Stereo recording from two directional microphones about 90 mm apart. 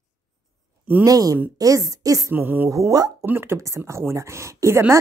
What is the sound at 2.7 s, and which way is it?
Speech, 40° right (ahead or behind).